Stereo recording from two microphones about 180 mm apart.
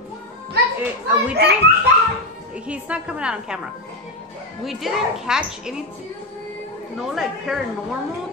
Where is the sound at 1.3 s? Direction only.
65° right (ahead or behind).